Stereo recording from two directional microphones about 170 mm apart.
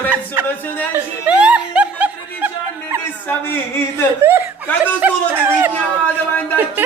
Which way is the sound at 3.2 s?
15° left (ahead or behind).